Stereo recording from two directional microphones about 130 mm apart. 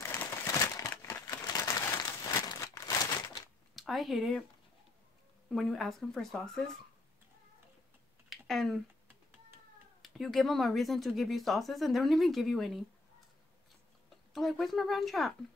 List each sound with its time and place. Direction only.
0.0 s crumpling: 20° left (ahead or behind)
3.7 s speech: centre (ahead or behind)
5.5 s speech: centre (ahead or behind)
8.3 s a sound: centre (ahead or behind)
10.0 s speech: centre (ahead or behind)
14.3 s speech: centre (ahead or behind)